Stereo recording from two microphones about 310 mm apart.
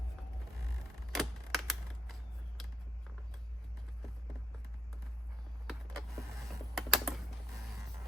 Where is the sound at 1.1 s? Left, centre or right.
Centre.